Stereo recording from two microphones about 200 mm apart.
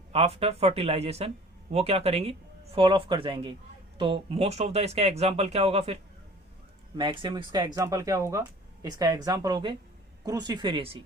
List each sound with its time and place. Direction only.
0.1 s speech: 30° right (ahead or behind)